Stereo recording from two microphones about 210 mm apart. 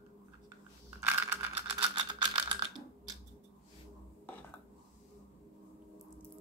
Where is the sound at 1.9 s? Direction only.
20° right (ahead or behind).